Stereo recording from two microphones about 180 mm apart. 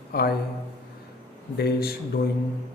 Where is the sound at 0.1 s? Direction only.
60° left (ahead or behind).